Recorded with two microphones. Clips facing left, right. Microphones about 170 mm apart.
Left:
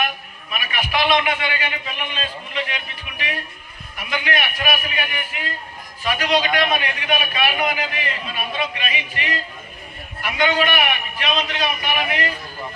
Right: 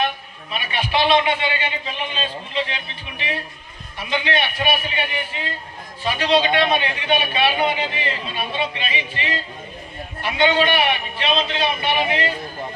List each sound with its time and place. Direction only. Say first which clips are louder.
0.5 s a man's voice: right 2 dB; 30° right (ahead or behind)